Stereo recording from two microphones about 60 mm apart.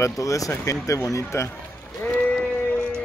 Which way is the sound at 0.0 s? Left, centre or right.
Left.